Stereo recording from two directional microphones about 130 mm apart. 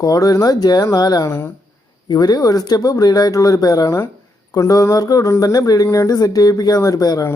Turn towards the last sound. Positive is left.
turn(degrees=30)  # may be behind; listen again after turning